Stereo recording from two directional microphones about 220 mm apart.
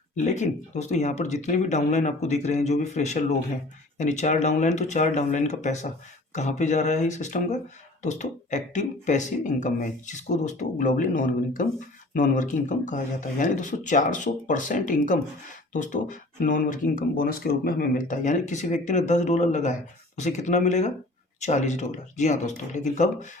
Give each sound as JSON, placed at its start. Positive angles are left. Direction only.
{"t": 0.3, "sound": "speech", "side_deg": 30}